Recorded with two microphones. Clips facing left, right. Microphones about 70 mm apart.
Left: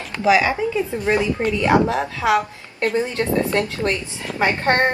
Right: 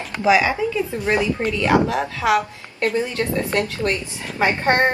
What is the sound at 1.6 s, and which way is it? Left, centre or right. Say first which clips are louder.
A woman's voice: left 1 dB; left.